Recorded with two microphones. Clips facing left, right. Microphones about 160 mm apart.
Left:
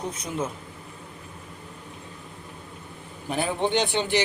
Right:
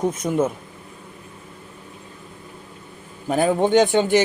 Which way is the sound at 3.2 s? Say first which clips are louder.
Right 7 dB; 45° right (ahead or behind).